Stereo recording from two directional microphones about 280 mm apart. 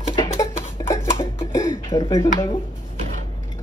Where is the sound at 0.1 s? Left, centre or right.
Centre.